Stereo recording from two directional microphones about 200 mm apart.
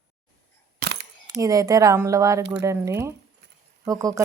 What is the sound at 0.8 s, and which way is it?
Coin, 55° right (ahead or behind).